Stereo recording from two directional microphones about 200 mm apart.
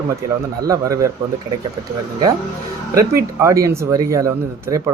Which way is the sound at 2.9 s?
15° right (ahead or behind).